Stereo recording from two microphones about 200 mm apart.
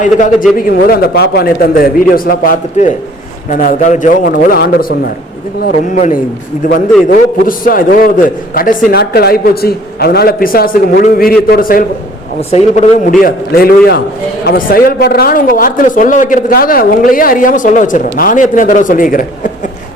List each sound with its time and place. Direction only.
0.0 s a man's voice: 40° left (ahead or behind)
12.4 s speech: 30° left (ahead or behind)